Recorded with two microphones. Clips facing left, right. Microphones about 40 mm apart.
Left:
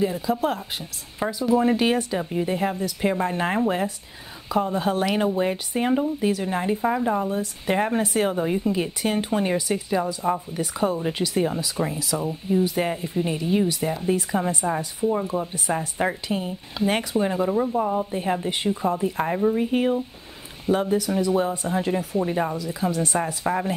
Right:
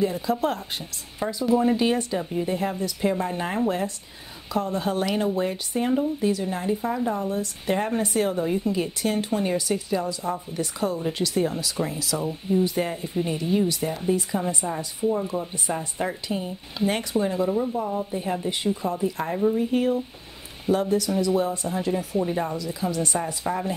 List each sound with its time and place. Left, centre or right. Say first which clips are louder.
0.0 s speech: left 1 dB; centre
1.2 s speech: left 1 dB; centre
3.0 s speech: left 2 dB; centre
16.8 s speech: left 1 dB; centre
17.2 s speech: left 1 dB; left
22.5 s speech: left 2 dB; centre